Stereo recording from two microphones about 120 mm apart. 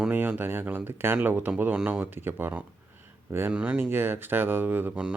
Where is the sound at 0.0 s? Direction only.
10° right (ahead or behind).